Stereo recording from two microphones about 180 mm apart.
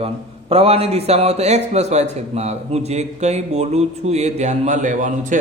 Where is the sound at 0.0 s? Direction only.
30° right (ahead or behind).